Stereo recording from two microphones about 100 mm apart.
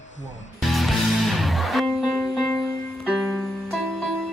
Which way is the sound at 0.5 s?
Centre (ahead or behind).